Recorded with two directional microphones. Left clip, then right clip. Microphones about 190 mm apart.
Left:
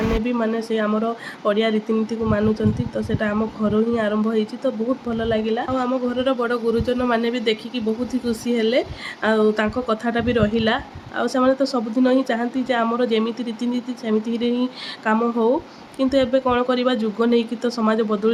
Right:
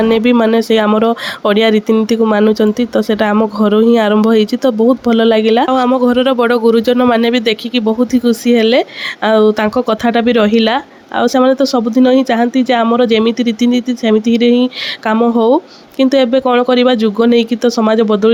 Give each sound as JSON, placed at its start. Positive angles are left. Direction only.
{"t": 0.3, "sound": "speech", "side_deg": -50}